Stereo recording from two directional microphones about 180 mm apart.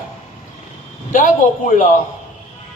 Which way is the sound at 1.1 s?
50° left (ahead or behind).